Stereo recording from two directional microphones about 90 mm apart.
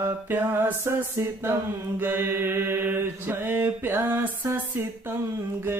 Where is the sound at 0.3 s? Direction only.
25° right (ahead or behind).